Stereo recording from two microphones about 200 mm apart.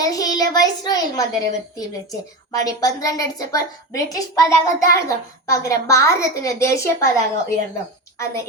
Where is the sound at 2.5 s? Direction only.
15° left (ahead or behind).